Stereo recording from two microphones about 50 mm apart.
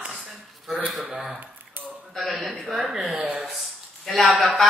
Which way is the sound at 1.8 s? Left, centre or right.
Right.